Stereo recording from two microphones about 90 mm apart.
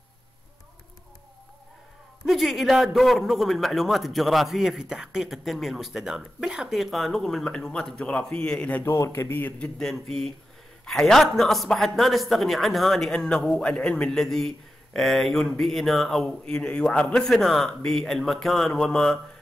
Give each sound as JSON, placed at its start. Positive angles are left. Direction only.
{"t": 2.2, "sound": "a man's voice", "side_deg": 0}
{"t": 8.8, "sound": "a man's voice", "side_deg": 30}
{"t": 9.6, "sound": "a man's voice", "side_deg": 5}